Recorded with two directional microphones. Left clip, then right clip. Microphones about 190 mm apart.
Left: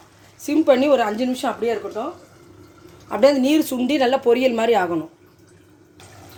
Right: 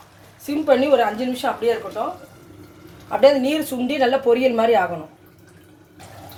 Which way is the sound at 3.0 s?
60° left (ahead or behind).